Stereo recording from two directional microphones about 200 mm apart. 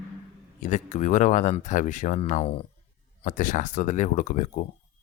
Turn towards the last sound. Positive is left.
turn(degrees=40)  # may be behind; listen again after turning